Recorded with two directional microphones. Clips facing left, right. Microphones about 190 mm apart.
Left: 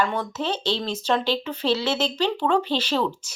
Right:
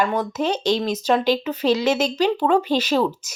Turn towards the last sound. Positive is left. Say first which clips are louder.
# right 4 dB
turn(degrees=-10)  # may be behind; listen again after turning